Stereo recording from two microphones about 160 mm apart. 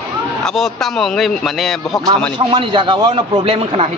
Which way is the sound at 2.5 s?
30° right (ahead or behind).